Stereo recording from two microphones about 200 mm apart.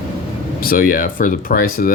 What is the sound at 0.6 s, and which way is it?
Speech, 45° left (ahead or behind).